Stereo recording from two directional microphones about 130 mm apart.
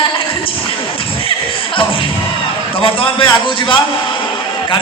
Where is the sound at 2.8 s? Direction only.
45° left (ahead or behind).